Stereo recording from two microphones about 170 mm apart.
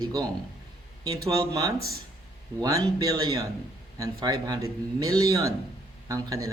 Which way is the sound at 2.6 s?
20° right (ahead or behind).